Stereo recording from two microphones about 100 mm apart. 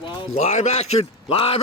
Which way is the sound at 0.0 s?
55° left (ahead or behind).